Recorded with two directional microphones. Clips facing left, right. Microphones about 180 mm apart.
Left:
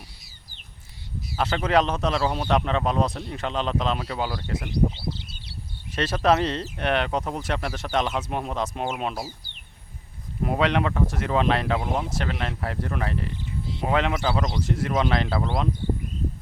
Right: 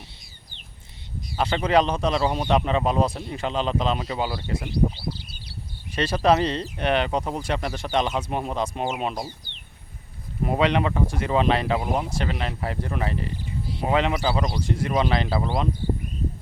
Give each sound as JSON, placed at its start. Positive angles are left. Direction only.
{"t": 1.4, "sound": "speech", "side_deg": 0}
{"t": 4.7, "sound": "bird", "side_deg": 20}
{"t": 5.9, "sound": "speech", "side_deg": 0}
{"t": 10.4, "sound": "speech", "side_deg": 0}